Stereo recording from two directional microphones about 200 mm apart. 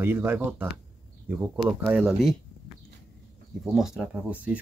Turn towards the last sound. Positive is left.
turn(degrees=-5)  # may be behind; listen again after turning